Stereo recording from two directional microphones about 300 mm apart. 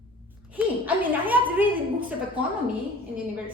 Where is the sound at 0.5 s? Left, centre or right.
Centre.